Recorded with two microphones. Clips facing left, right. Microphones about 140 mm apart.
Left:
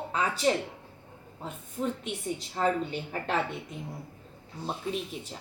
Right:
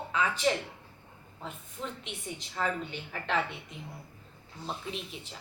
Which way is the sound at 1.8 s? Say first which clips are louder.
Left 8 dB; 40° left (ahead or behind).